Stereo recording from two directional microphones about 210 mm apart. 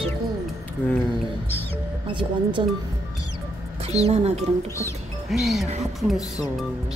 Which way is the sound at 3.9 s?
30° right (ahead or behind).